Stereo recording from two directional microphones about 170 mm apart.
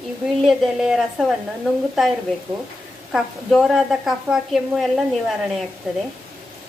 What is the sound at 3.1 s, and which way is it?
A woman's voice, centre (ahead or behind).